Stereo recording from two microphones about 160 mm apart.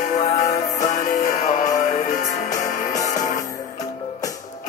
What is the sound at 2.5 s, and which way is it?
Music, 20° left (ahead or behind).